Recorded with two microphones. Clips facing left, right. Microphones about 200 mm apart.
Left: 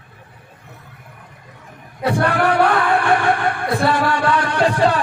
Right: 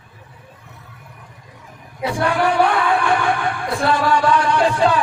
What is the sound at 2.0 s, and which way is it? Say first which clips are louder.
Speech: left 1 dB; 60° left (ahead or behind).